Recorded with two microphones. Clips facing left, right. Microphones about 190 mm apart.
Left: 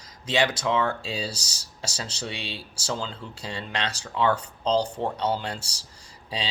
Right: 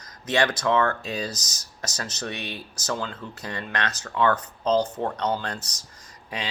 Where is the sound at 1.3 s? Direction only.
30° left (ahead or behind).